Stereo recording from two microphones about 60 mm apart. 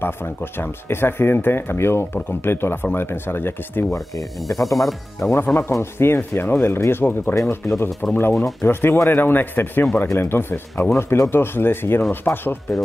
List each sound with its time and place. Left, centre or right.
0.0 s speech: left
4.2 s speech: centre
5.5 s speech: left
7.6 s speech: left
8.1 s speech: left
11.0 s speech: left